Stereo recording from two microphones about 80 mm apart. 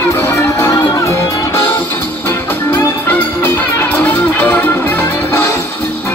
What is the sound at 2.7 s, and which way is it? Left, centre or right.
Music, left.